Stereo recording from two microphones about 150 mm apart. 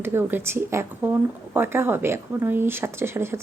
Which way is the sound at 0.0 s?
15° right (ahead or behind).